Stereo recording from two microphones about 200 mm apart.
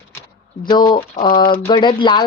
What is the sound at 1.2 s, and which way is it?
A woman's voice, 25° left (ahead or behind).